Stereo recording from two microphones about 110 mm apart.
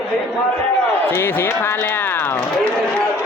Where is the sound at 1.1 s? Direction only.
20° left (ahead or behind).